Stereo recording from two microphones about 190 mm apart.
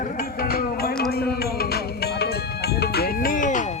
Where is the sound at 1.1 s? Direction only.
55° left (ahead or behind).